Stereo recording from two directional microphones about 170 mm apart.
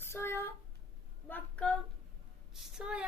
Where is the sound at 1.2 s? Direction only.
10° left (ahead or behind).